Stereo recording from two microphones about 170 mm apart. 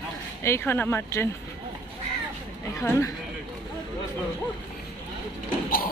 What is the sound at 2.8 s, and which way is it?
Speech, 15° left (ahead or behind).